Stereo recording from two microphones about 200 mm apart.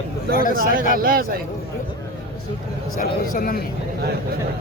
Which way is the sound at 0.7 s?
45° right (ahead or behind).